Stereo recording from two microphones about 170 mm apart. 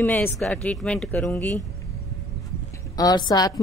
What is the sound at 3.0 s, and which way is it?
Speech, 25° left (ahead or behind).